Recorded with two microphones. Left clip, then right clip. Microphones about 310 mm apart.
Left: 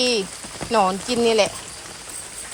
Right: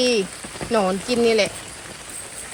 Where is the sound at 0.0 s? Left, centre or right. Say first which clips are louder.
Right 1 dB; centre.